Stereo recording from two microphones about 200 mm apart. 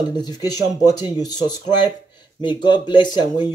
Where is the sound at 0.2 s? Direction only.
20° left (ahead or behind).